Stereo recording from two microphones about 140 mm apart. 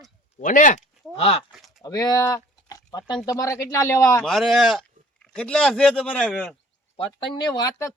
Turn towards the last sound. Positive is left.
turn(degrees=25)  # may be behind; listen again after turning